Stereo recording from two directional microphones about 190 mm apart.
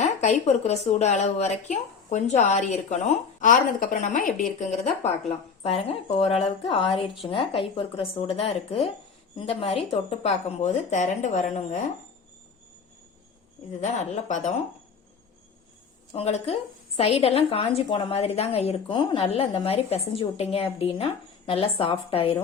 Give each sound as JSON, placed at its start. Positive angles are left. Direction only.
{"t": 0.0, "sound": "a woman's voice", "side_deg": 35}
{"t": 5.6, "sound": "a woman's voice", "side_deg": 30}
{"t": 13.8, "sound": "a woman's voice", "side_deg": 35}
{"t": 16.1, "sound": "a woman's voice", "side_deg": 35}